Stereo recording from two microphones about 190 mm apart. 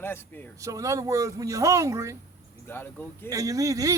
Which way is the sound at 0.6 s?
15° right (ahead or behind).